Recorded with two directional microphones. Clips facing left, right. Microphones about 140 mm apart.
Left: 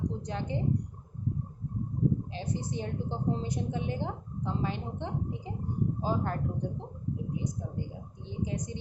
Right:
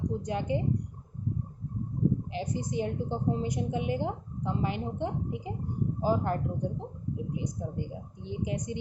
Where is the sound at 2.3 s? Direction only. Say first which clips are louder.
Right 3 dB; 15° right (ahead or behind).